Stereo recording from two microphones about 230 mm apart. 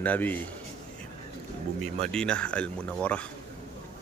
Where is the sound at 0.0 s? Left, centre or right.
Centre.